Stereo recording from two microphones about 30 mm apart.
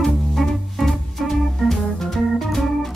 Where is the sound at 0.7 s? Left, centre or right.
Centre.